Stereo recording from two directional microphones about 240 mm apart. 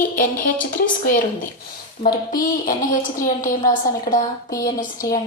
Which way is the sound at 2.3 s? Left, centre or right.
Left.